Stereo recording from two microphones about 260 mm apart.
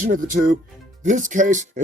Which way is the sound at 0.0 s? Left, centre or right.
Right.